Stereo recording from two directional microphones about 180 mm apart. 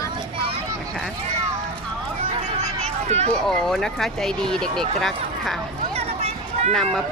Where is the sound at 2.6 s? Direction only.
35° right (ahead or behind).